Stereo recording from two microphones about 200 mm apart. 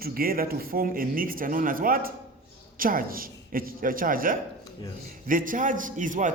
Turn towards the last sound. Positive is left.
turn(degrees=-40)  # may be behind; listen again after turning